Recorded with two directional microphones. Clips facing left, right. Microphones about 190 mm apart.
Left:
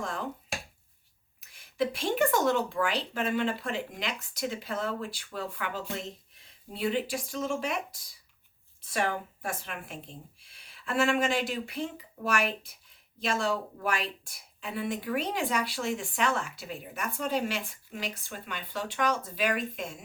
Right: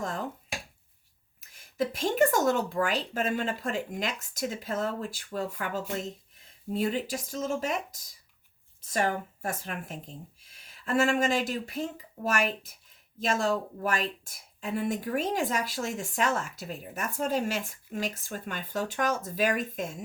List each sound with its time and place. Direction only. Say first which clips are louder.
1.4 s a woman's voice: even; 45° right (ahead or behind)